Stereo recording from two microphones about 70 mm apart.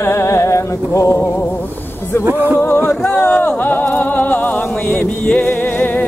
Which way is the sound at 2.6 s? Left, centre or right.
Left.